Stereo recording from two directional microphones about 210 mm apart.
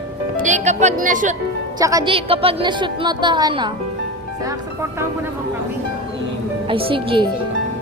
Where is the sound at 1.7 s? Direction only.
15° right (ahead or behind).